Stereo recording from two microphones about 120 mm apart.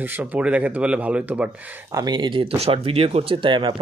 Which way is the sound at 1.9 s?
35° right (ahead or behind).